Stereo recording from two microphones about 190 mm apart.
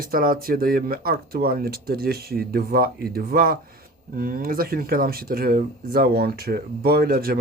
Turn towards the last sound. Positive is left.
turn(degrees=-50)  # may be behind; listen again after turning